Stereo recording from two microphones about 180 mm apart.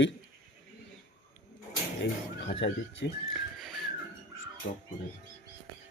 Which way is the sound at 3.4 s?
Centre (ahead or behind).